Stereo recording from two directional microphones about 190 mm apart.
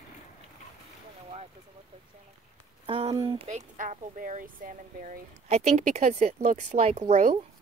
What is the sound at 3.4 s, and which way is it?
Speech, 40° right (ahead or behind).